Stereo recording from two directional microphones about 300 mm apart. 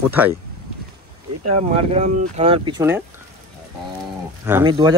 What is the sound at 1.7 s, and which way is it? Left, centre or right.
Speech, right.